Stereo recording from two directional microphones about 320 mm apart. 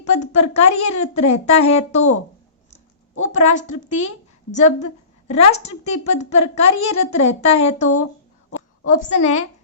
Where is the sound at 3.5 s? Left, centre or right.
Left.